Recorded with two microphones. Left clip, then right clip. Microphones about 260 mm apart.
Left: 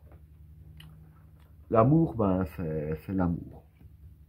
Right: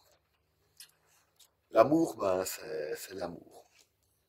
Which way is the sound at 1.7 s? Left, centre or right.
Right.